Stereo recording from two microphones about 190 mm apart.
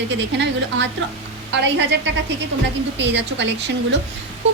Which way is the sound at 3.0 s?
70° right (ahead or behind).